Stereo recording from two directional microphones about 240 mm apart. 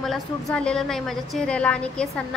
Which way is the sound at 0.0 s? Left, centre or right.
Centre.